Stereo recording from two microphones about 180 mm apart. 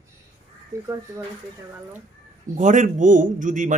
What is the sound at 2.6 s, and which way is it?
A man's voice, 45° right (ahead or behind).